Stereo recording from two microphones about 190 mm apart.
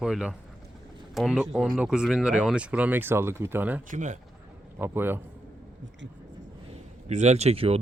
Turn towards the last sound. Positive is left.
turn(degrees=-30)  # may be behind; listen again after turning